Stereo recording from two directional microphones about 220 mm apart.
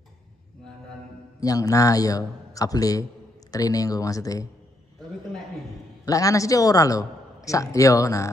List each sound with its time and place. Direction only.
1.4 s a man's voice: 15° left (ahead or behind)
6.0 s a man's voice: 15° left (ahead or behind)